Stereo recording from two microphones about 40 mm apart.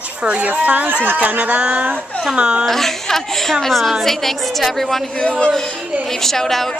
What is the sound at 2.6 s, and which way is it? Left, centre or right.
Speech, centre.